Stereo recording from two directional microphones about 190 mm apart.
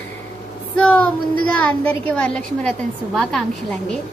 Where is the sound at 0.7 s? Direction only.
5° left (ahead or behind).